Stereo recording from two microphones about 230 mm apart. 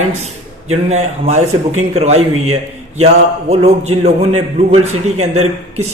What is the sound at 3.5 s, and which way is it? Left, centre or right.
Speech, right.